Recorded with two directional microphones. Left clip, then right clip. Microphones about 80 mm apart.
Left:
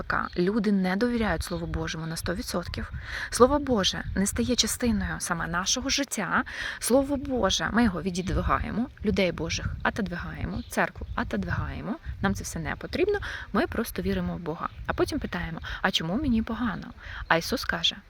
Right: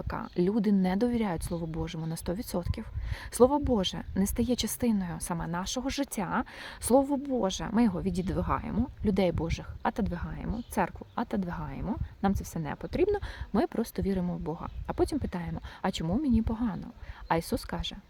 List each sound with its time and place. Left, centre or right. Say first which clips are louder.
0.1 s speech: left 4 dB; right
8.4 s speech: left 7 dB; right
9.0 s speech: left 2 dB; right
11.6 s speech: left 2 dB; centre
12.2 s speech: left 2 dB; right